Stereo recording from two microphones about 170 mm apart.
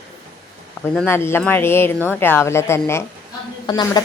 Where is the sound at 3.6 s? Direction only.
25° left (ahead or behind).